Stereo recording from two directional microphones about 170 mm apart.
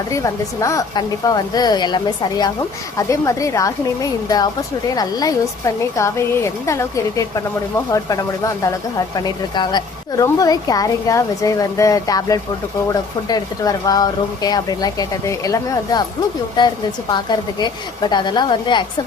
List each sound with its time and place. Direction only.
0.1 s speech: 20° left (ahead or behind)
8.6 s speech: 20° left (ahead or behind)